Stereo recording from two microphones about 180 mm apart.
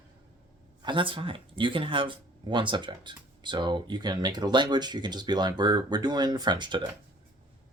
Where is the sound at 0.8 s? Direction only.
30° right (ahead or behind).